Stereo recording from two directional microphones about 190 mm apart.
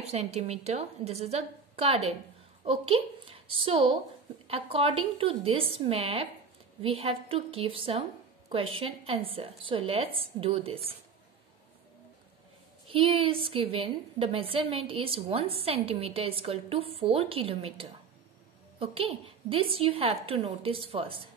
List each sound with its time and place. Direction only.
0.0 s a woman's voice: 35° right (ahead or behind)
12.9 s a woman's voice: 30° right (ahead or behind)